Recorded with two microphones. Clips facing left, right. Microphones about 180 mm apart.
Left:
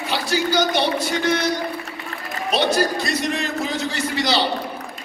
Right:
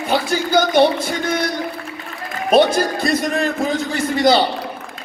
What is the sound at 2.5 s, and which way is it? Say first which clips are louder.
Speech: right 6 dB; 50° right (ahead or behind).